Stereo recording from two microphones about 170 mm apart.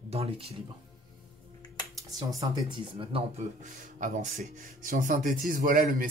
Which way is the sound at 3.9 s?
50° right (ahead or behind).